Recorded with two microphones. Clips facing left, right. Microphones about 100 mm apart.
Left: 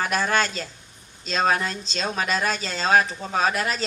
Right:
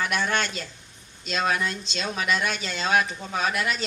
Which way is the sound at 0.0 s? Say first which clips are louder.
Left 3 dB; 40° left (ahead or behind).